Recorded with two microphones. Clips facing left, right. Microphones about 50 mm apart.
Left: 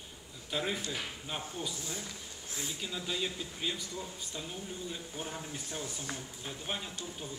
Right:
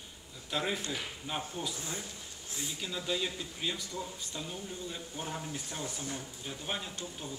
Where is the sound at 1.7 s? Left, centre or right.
Right.